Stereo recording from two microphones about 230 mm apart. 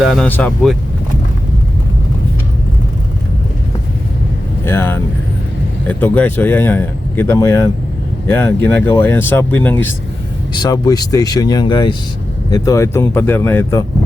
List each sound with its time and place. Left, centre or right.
0.0 s speech: centre
4.6 s speech: centre